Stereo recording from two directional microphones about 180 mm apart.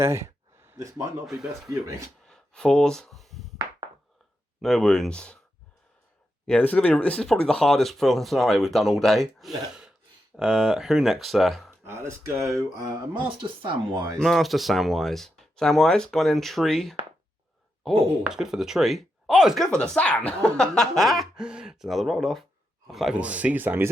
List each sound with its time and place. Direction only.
0.0 s a sound: 15° right (ahead or behind)
1.3 s speech: centre (ahead or behind)
2.2 s a sound: 5° left (ahead or behind)
4.6 s speech: centre (ahead or behind)
6.5 s speech: 10° left (ahead or behind)
11.9 s speech: 15° right (ahead or behind)
14.2 s speech: centre (ahead or behind)